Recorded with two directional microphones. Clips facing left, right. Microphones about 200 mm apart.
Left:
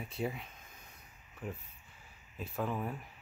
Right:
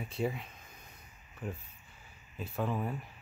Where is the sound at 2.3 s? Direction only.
Centre (ahead or behind).